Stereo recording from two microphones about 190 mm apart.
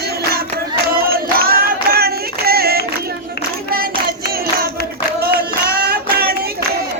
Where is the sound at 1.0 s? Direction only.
50° right (ahead or behind).